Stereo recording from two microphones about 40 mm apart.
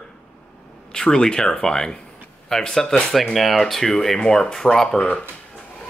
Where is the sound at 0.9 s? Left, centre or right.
Centre.